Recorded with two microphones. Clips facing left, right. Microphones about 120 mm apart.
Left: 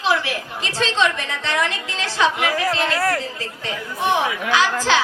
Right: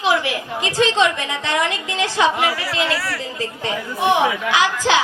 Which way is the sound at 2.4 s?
50° left (ahead or behind).